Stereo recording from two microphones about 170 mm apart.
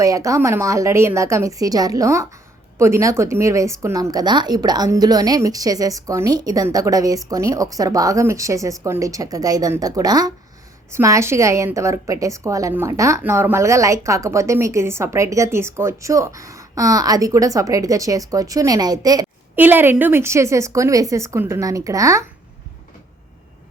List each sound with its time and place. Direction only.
0.0 s a woman's voice: 20° right (ahead or behind)
19.5 s a woman's voice: 10° right (ahead or behind)